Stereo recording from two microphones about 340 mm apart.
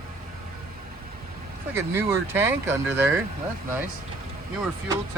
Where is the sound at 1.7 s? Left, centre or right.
Centre.